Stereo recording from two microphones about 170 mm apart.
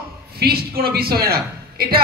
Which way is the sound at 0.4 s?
65° right (ahead or behind).